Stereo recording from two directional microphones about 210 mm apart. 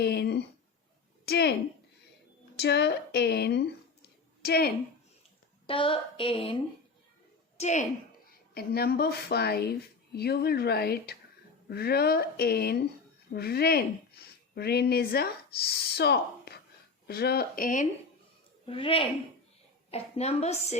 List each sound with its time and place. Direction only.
0.0 s a sound: 50° left (ahead or behind)
1.2 s speech: 50° left (ahead or behind)
2.6 s speech: 55° left (ahead or behind)
5.6 s a woman's voice: 25° left (ahead or behind)
7.6 s a woman's voice: 35° left (ahead or behind)
8.5 s speech: 45° left (ahead or behind)
18.6 s a woman's voice: 25° left (ahead or behind)